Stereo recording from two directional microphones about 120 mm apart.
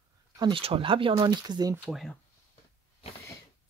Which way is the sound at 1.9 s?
Centre (ahead or behind).